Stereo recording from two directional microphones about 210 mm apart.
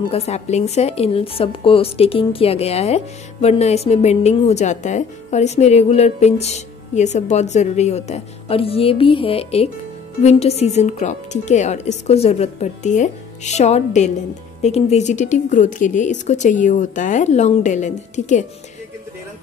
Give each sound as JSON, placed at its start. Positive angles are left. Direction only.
{"t": 0.1, "sound": "a woman's voice", "side_deg": 30}